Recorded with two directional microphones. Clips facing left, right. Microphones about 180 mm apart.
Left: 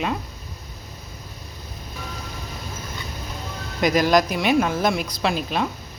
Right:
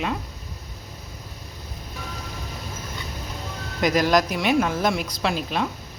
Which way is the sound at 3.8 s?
5° left (ahead or behind).